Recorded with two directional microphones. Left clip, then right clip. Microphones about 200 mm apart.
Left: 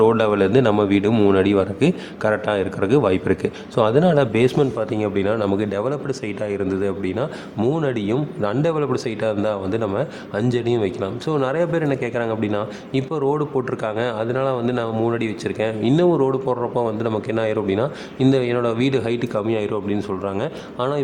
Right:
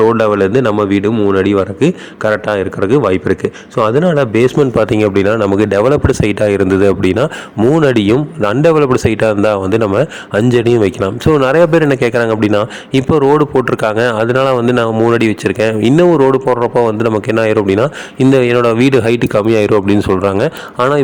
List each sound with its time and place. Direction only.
0.0 s speech: 20° right (ahead or behind)
4.8 s a man's voice: 40° right (ahead or behind)